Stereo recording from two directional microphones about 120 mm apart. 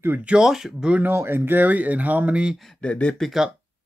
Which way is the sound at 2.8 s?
10° left (ahead or behind).